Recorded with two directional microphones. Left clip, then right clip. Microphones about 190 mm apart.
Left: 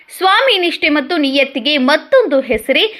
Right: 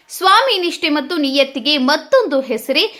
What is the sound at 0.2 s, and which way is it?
A woman's voice, 10° left (ahead or behind).